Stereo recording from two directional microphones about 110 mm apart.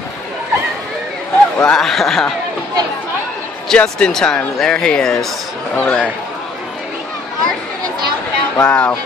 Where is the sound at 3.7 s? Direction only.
5° left (ahead or behind).